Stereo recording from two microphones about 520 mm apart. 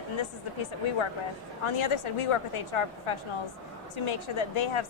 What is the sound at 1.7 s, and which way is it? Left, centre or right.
A woman's voice, left.